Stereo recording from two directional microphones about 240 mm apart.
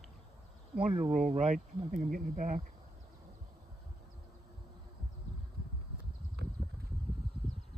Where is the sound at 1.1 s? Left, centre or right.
Right.